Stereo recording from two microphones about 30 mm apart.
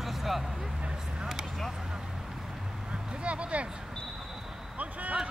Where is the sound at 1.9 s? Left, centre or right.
Centre.